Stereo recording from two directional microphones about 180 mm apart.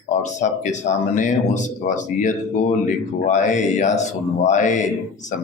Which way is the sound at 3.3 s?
40° left (ahead or behind).